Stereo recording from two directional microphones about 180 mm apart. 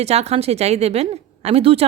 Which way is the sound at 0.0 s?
35° right (ahead or behind).